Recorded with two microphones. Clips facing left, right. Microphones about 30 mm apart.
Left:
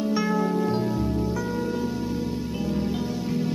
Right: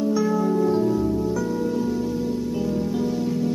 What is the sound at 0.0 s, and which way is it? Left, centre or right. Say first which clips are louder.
Music: right 3 dB; left.